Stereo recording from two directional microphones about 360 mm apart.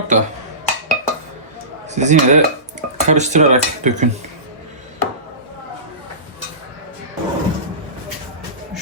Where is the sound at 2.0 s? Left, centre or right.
Centre.